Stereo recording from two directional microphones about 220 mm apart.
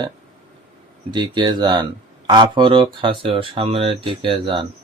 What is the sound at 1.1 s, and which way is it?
Speech, 20° right (ahead or behind).